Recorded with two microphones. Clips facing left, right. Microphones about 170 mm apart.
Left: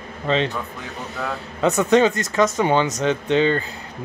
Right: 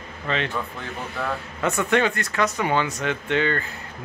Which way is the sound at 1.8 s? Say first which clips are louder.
Left 5 dB; 20° left (ahead or behind).